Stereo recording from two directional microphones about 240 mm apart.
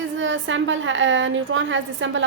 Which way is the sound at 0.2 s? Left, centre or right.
Right.